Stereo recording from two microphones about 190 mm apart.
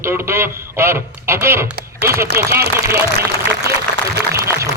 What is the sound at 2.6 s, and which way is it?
A man's voice, 55° right (ahead or behind).